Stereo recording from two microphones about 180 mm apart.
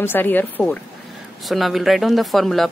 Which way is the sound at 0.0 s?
10° left (ahead or behind).